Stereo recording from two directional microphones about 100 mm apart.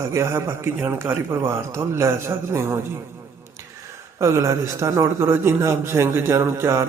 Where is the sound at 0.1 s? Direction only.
30° right (ahead or behind).